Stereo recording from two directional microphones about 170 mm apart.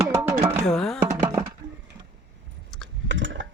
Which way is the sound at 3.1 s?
90° right.